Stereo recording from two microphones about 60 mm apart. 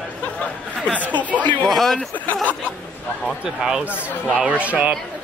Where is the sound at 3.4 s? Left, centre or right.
Centre.